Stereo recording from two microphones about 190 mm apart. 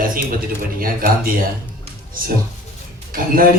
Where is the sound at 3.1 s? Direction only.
50° right (ahead or behind).